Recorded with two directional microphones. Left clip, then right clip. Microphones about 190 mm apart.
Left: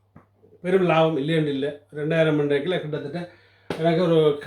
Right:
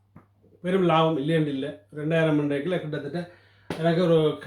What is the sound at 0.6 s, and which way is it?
Speech, 15° left (ahead or behind).